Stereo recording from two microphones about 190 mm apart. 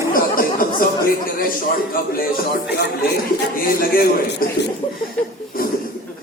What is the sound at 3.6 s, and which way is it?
Speech, 50° left (ahead or behind).